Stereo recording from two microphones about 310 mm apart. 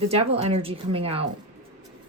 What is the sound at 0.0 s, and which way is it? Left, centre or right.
Speech, centre.